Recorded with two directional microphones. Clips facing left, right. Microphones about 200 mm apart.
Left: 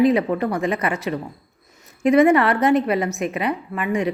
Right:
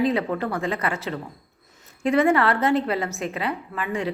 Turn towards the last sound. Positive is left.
turn(degrees=15)  # may be behind; listen again after turning